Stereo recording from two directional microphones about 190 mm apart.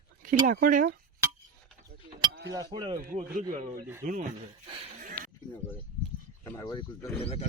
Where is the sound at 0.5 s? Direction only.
45° right (ahead or behind).